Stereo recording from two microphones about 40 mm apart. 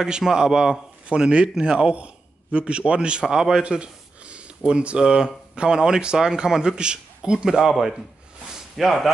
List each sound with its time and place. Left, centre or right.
0.0 s a man's voice: centre
1.1 s a man's voice: right
3.6 s speech: right
7.4 s a man's voice: centre
8.7 s speech: centre